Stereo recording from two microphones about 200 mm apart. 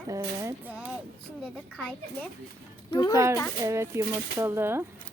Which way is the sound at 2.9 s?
20° left (ahead or behind).